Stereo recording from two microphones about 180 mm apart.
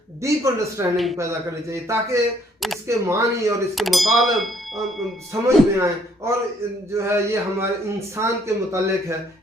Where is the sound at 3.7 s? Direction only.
Centre (ahead or behind).